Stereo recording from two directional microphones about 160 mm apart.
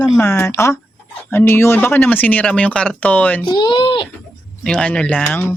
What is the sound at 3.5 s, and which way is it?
Speech, 30° left (ahead or behind).